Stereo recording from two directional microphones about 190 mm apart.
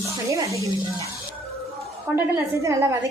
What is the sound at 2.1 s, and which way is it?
Speech, 15° right (ahead or behind).